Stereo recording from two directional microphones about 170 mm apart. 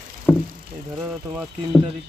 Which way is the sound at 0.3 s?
10° left (ahead or behind).